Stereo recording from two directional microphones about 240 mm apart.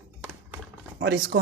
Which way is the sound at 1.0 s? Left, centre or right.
Right.